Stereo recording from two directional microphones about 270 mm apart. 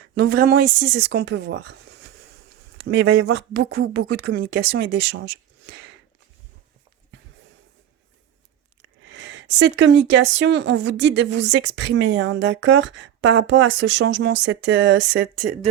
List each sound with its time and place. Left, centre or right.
0.1 s speech: right
5.2 s speech: right
8.8 s speech: right